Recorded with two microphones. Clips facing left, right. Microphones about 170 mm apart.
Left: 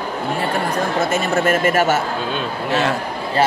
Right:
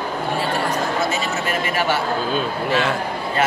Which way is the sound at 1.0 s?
50° left (ahead or behind).